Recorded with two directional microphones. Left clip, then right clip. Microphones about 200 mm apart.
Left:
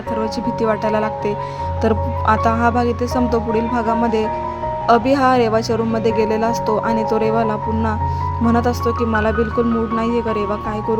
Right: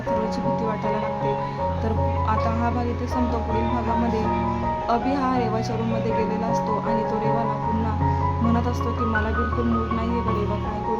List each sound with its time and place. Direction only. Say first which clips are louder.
1.8 s speech: left 7 dB; 35° left (ahead or behind)
4.9 s speech: left 11 dB; 35° left (ahead or behind)